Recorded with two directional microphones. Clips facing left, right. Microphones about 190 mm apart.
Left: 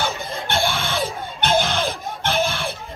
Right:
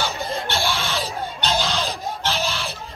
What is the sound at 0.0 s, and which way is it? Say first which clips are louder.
Music: even; 55° left (ahead or behind).